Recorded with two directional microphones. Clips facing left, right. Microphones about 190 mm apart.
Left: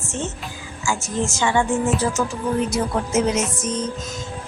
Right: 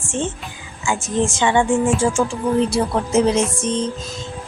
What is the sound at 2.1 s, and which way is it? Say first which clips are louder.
Music: right 4 dB; 30° right (ahead or behind).